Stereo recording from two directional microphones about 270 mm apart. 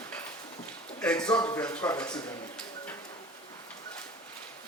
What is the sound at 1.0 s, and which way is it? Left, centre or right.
A man's voice, centre.